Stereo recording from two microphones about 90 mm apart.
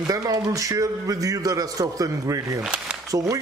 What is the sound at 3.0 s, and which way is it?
Speech, 40° right (ahead or behind).